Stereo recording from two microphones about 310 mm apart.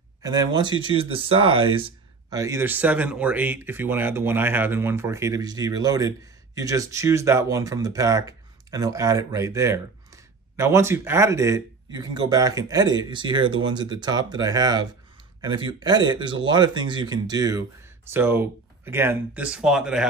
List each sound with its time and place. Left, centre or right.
0.2 s speech: centre